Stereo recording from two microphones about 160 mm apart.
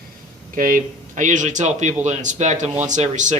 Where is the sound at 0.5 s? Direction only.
55° right (ahead or behind).